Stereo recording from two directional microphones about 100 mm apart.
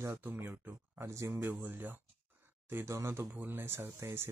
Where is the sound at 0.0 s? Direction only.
25° right (ahead or behind).